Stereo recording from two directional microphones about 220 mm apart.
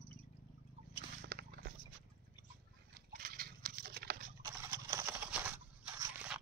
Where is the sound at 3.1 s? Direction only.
40° right (ahead or behind).